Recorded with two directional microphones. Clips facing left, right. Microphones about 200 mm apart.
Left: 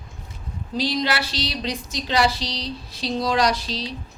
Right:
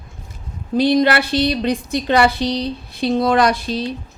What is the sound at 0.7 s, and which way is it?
Speech, 55° right (ahead or behind).